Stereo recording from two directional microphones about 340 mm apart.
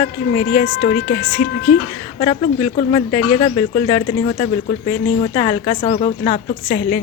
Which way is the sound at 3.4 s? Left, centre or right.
Centre.